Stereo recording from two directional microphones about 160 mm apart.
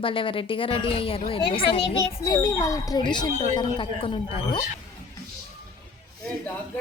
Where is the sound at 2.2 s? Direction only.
20° left (ahead or behind).